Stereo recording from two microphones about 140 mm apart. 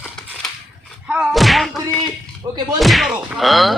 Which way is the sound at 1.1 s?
Centre (ahead or behind).